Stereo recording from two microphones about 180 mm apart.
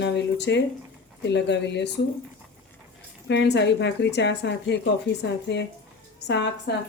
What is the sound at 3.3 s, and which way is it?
Speech, 70° left (ahead or behind).